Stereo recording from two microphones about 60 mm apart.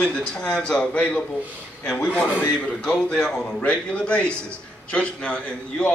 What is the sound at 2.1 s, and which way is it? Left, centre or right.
A man's voice, left.